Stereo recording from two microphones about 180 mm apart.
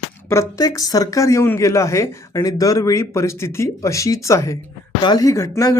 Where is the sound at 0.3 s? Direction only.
15° left (ahead or behind).